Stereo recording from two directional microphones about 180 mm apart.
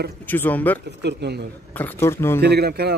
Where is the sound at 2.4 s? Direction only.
65° right (ahead or behind).